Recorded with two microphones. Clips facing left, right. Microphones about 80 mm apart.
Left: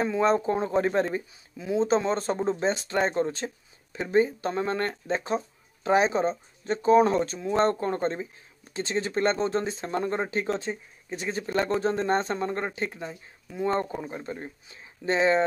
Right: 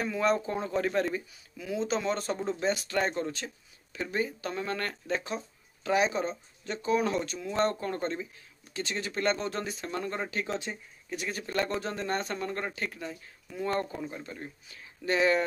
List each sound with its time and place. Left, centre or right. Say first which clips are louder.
0.0 s speech: left 5 dB; left